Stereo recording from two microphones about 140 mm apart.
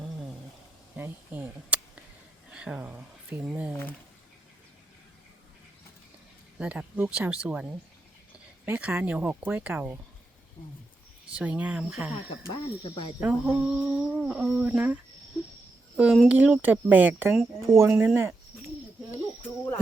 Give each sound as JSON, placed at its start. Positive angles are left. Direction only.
{"t": 0.9, "sound": "a sound", "side_deg": -15}
{"t": 3.4, "sound": "speech", "side_deg": -10}
{"t": 3.7, "sound": "speech", "side_deg": 15}
{"t": 6.6, "sound": "speech", "side_deg": -10}
{"t": 11.3, "sound": "speech", "side_deg": -10}
{"t": 13.1, "sound": "speech", "side_deg": -10}
{"t": 16.0, "sound": "speech", "side_deg": 0}
{"t": 17.9, "sound": "cricket", "side_deg": -10}
{"t": 19.4, "sound": "a sound", "side_deg": 20}